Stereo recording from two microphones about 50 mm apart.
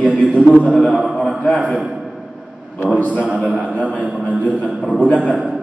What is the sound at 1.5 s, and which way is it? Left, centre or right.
Speech, right.